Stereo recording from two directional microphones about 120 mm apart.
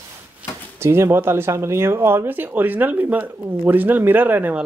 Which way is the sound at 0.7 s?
20° right (ahead or behind).